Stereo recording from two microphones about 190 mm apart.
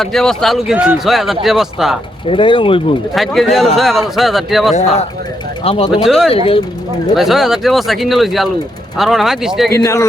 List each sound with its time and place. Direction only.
0.0 s speech: centre (ahead or behind)
2.2 s speech: 25° left (ahead or behind)
3.2 s speech: centre (ahead or behind)
5.6 s speech: 30° left (ahead or behind)
6.1 s speech: centre (ahead or behind)
6.3 s speech: 30° left (ahead or behind)
7.2 s speech: centre (ahead or behind)
9.7 s speech: 15° left (ahead or behind)